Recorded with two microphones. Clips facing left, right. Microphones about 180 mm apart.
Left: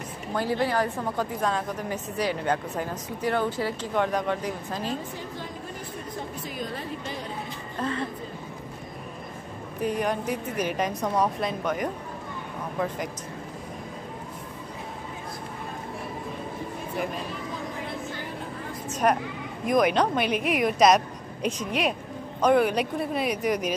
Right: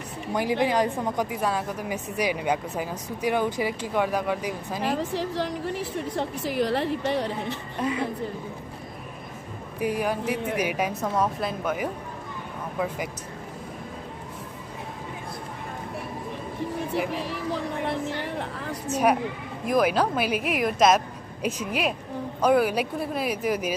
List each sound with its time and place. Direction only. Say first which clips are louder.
0.3 s a woman's voice: right 2 dB; 15° right (ahead or behind)
4.8 s a woman's voice: right 6 dB; 80° right
7.8 s a woman's voice: right 2 dB; 10° right (ahead or behind)
9.8 s a woman's voice: right 1 dB; 10° right (ahead or behind)
17.1 s vehicle: right 4 dB; 75° right (ahead or behind)
18.9 s a sound: right 2 dB; 10° right (ahead or behind)
19.6 s a woman's voice: even; 5° right (ahead or behind)